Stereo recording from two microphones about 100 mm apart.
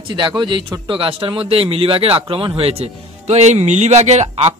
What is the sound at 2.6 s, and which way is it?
Speech, 80° right.